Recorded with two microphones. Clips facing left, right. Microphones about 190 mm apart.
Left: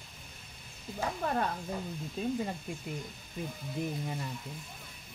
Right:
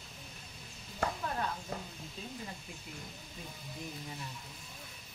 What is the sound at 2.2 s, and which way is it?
Speech, 55° left (ahead or behind).